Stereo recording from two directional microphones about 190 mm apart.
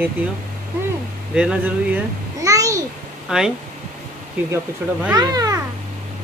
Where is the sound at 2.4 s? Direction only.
15° right (ahead or behind).